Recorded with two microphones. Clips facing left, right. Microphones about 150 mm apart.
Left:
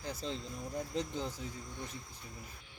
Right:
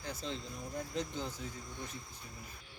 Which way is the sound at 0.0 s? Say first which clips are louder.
Left 1 dB; 35° left (ahead or behind).